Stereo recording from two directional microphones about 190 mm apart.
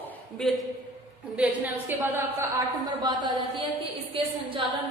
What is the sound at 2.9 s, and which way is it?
Speech, 20° right (ahead or behind).